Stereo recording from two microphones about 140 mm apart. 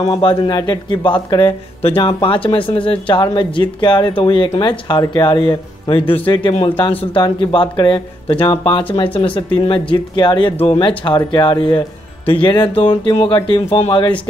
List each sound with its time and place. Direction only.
0.0 s speech: 40° left (ahead or behind)